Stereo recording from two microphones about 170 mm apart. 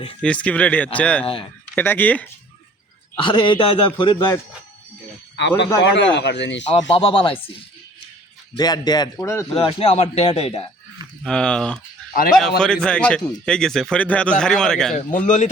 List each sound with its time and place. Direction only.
0.2 s speech: 5° left (ahead or behind)
1.2 s a man's voice: 35° left (ahead or behind)
1.7 s speech: 10° left (ahead or behind)
3.2 s a man's voice: 30° left (ahead or behind)
5.8 s speech: 90° left
6.7 s a man's voice: 30° left (ahead or behind)
8.5 s a man's voice: 25° left (ahead or behind)
9.6 s a man's voice: 35° left (ahead or behind)
11.2 s a man's voice: 5° left (ahead or behind)
14.9 s a man's voice: 50° left (ahead or behind)